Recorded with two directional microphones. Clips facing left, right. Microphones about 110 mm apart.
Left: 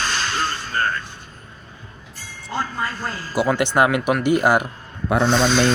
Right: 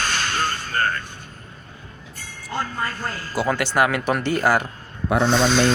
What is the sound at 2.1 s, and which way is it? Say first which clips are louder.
Music: left 1 dB; 50° right (ahead or behind).